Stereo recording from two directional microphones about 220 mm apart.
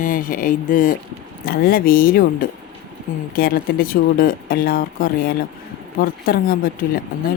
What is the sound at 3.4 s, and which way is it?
Speech, 40° left (ahead or behind).